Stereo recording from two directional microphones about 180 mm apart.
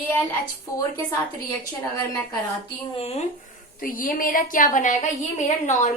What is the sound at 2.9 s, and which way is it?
Speech, 35° left (ahead or behind).